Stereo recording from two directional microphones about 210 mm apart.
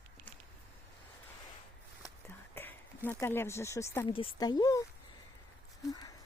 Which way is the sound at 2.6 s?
10° left (ahead or behind).